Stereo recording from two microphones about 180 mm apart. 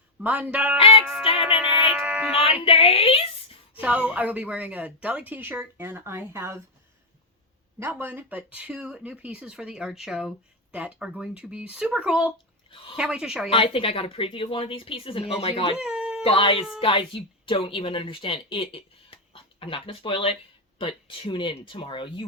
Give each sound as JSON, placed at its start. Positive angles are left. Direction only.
{"t": 0.2, "sound": "speech", "side_deg": -10}
{"t": 0.8, "sound": "a woman's voice", "side_deg": 30}
{"t": 1.2, "sound": "music", "side_deg": 30}
{"t": 1.5, "sound": "a sound", "side_deg": -5}
{"t": 2.3, "sound": "a woman's voice", "side_deg": 30}
{"t": 3.8, "sound": "speech", "side_deg": -10}
{"t": 7.8, "sound": "speech", "side_deg": -10}
{"t": 12.7, "sound": "speech", "side_deg": 30}
{"t": 13.0, "sound": "a woman's voice", "side_deg": -5}
{"t": 13.5, "sound": "a woman's voice", "side_deg": 30}
{"t": 15.7, "sound": "baby cry", "side_deg": -5}
{"t": 16.2, "sound": "speech", "side_deg": 30}